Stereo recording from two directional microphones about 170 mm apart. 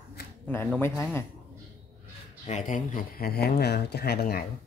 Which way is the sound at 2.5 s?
45° left (ahead or behind).